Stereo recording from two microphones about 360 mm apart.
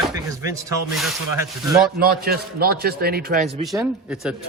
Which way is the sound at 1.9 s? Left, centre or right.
Right.